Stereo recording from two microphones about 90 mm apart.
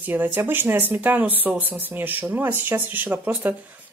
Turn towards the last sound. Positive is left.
turn(degrees=-20)  # may be behind; listen again after turning